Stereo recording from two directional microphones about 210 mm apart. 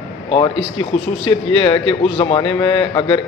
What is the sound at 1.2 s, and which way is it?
A man's voice, 25° left (ahead or behind).